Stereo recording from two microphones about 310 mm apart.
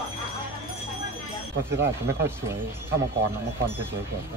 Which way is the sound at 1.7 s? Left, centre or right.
Right.